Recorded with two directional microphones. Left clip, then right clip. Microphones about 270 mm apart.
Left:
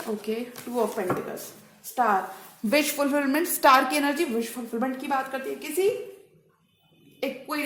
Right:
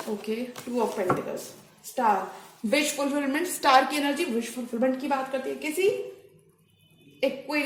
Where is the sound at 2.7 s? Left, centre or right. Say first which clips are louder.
Left 2 dB; left.